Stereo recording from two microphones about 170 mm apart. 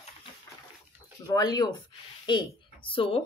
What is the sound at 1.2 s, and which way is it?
A woman's voice, 25° left (ahead or behind).